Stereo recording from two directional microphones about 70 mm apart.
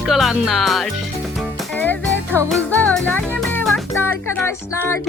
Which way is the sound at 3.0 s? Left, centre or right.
Left.